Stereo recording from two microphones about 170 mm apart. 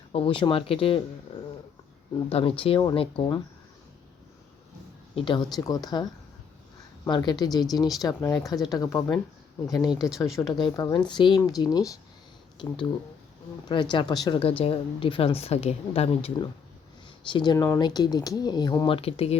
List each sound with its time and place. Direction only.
0.1 s a woman's voice: 30° left (ahead or behind)
1.3 s a sound: 35° left (ahead or behind)
2.3 s a woman's voice: 35° left (ahead or behind)
5.1 s speech: 30° left (ahead or behind)
13.9 s a woman's voice: 25° left (ahead or behind)
18.9 s a woman's voice: 35° left (ahead or behind)